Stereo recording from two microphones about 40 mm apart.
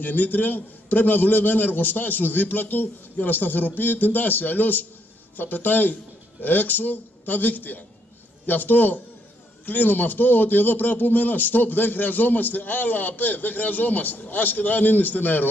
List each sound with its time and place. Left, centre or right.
0.0 s a man's voice: left